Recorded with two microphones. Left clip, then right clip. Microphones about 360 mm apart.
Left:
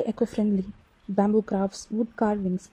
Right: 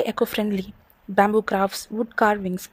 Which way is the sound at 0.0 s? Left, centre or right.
Right.